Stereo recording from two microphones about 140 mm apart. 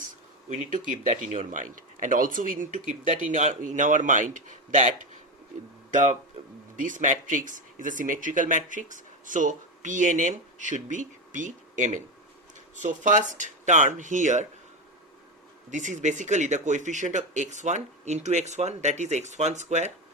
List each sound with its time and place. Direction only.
0.5 s speech: 65° right (ahead or behind)
15.7 s speech: 60° right (ahead or behind)